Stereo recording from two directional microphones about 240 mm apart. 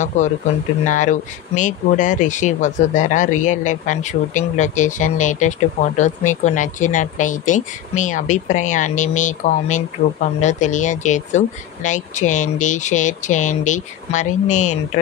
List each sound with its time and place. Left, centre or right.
0.2 s speech: left